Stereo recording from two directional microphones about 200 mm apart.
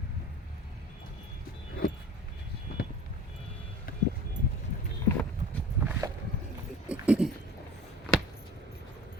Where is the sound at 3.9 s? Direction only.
45° left (ahead or behind).